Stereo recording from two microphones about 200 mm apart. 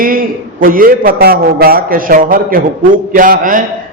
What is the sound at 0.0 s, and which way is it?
A man's voice, 45° right (ahead or behind).